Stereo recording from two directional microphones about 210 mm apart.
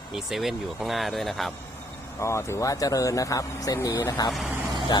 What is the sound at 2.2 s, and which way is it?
Speech, 15° left (ahead or behind).